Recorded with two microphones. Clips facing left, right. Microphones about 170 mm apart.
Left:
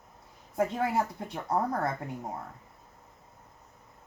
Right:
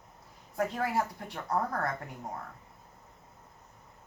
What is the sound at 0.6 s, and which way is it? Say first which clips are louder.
A woman's voice: left 3 dB; 25° left (ahead or behind).